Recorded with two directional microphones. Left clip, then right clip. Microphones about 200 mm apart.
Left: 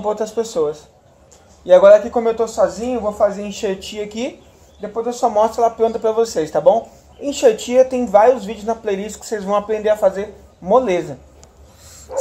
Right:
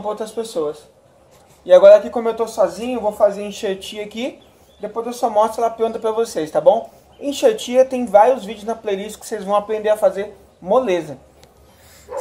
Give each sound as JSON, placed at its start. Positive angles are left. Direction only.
{"t": 0.0, "sound": "speech", "side_deg": 20}
{"t": 1.7, "sound": "speech", "side_deg": 10}